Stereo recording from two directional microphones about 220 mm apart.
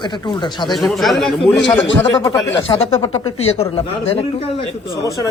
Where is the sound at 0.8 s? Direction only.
Centre (ahead or behind).